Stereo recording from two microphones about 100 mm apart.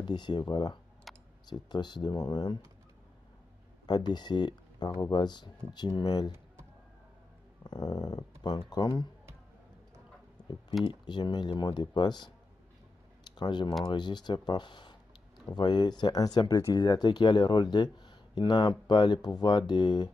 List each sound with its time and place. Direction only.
0.0 s speech: 50° left (ahead or behind)
1.1 s clicking: centre (ahead or behind)
1.5 s speech: 45° left (ahead or behind)
3.8 s speech: 45° left (ahead or behind)
7.6 s speech: 40° left (ahead or behind)
10.9 s speech: 45° left (ahead or behind)